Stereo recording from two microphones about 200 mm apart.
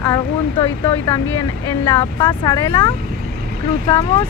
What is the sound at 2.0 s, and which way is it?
Speech, 20° left (ahead or behind).